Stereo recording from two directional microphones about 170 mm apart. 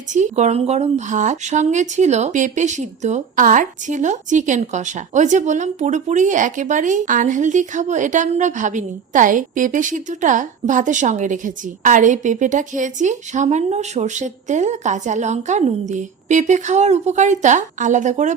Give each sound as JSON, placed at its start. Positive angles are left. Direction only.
{"t": 0.1, "sound": "speech", "side_deg": -45}